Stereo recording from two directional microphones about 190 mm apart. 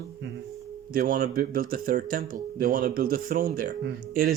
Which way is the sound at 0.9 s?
50° right (ahead or behind).